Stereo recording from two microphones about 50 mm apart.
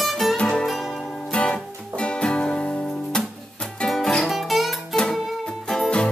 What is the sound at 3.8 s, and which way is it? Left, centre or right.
Music, centre.